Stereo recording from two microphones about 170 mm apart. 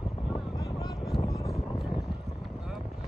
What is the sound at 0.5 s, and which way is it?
Vehicle, 20° left (ahead or behind).